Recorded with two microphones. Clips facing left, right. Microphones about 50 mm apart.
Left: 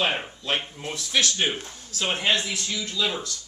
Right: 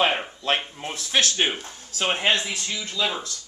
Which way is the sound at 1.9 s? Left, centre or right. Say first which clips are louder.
Right 2 dB; right.